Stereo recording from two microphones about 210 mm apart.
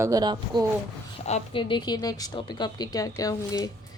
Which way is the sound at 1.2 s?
30° left (ahead or behind).